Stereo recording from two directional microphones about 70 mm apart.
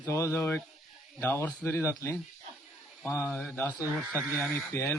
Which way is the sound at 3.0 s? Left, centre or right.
Left.